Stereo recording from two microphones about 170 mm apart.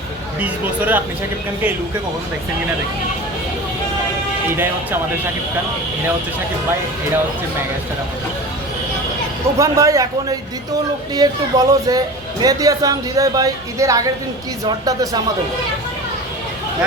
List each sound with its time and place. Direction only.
0.3 s speech: 10° right (ahead or behind)
4.5 s speech: 10° right (ahead or behind)
9.6 s speech: 20° right (ahead or behind)